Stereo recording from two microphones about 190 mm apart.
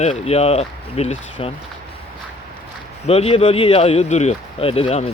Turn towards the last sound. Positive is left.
turn(degrees=35)  # may be behind; listen again after turning